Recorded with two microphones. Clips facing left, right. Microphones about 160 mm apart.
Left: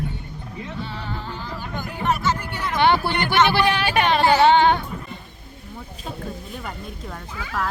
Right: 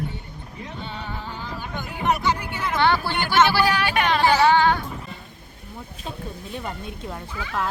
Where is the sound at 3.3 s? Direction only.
20° left (ahead or behind).